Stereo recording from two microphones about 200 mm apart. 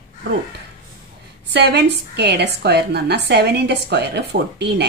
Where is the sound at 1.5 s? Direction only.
55° right (ahead or behind).